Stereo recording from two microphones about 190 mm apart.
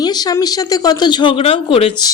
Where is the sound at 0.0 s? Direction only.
20° left (ahead or behind).